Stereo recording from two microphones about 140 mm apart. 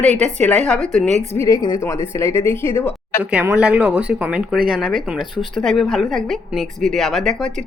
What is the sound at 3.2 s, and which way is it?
Speech, 10° right (ahead or behind).